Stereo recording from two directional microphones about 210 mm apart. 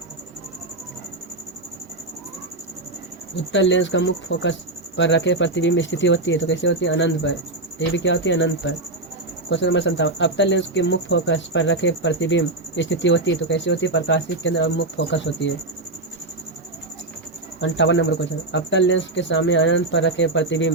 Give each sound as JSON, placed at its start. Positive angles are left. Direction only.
{"t": 3.5, "sound": "speech", "side_deg": 60}
{"t": 17.6, "sound": "speech", "side_deg": 60}